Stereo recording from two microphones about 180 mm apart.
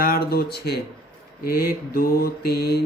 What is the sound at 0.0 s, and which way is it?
Speech, 60° left (ahead or behind).